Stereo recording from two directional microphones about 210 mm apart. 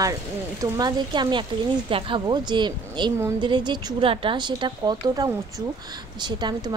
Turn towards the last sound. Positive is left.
turn(degrees=-20)  # may be behind; listen again after turning